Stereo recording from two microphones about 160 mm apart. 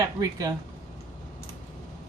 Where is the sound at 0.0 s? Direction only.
25° right (ahead or behind).